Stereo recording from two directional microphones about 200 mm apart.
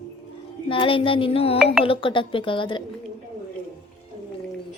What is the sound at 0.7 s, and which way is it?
A woman's voice, 25° left (ahead or behind).